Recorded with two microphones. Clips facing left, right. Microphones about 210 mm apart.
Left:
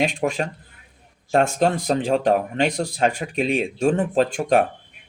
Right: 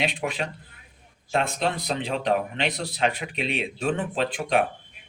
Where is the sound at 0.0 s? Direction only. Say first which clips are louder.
Left 6 dB; 45° left (ahead or behind).